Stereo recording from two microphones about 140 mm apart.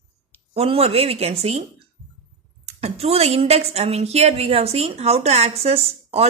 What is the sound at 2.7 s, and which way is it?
A woman's voice, 45° right (ahead or behind).